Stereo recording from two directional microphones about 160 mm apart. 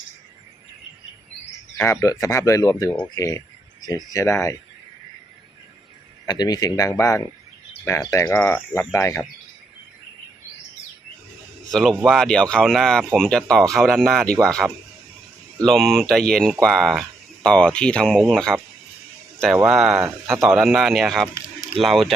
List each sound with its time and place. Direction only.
1.8 s speech: 15° left (ahead or behind)
6.2 s speech: 25° left (ahead or behind)
11.7 s speech: centre (ahead or behind)
20.0 s speech: 15° right (ahead or behind)
20.7 s speech: centre (ahead or behind)